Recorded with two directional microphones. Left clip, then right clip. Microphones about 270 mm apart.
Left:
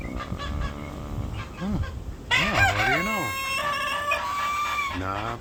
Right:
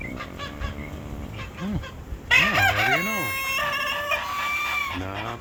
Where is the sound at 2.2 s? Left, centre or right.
Right.